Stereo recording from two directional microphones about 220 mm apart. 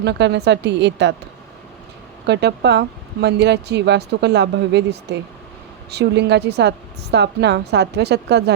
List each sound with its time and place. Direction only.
0.0 s speech: 50° right (ahead or behind)
2.2 s speech: 50° right (ahead or behind)